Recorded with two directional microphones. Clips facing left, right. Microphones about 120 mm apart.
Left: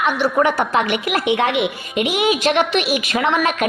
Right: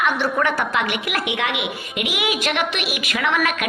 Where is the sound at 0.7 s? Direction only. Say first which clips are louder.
Left 4 dB; 30° left (ahead or behind).